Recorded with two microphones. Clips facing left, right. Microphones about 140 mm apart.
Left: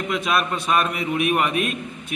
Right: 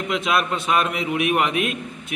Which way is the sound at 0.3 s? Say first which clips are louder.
Right 1 dB; centre (ahead or behind).